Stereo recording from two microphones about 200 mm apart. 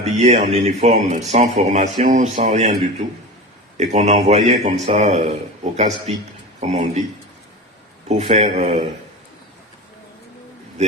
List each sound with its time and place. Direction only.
0.0 s speech: 35° right (ahead or behind)
8.0 s speech: 30° right (ahead or behind)